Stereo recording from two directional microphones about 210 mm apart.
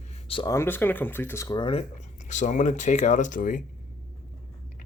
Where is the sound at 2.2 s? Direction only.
35° left (ahead or behind).